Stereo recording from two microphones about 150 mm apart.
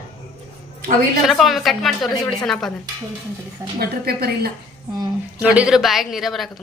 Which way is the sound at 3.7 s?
90° right.